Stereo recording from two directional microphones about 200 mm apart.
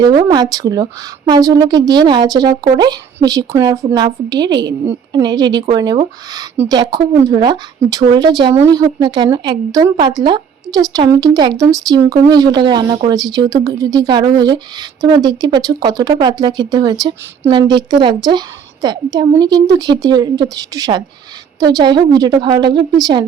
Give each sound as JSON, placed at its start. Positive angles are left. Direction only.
{"t": 0.2, "sound": "speech", "side_deg": -20}